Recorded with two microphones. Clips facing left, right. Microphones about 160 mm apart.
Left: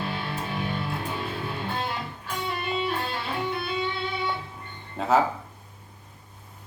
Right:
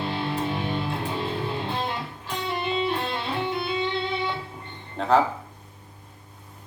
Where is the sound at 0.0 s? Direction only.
25° right (ahead or behind).